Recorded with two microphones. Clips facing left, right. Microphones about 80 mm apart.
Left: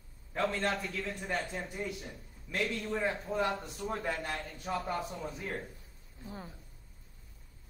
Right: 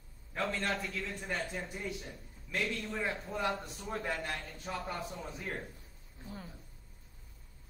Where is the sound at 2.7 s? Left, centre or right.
Left.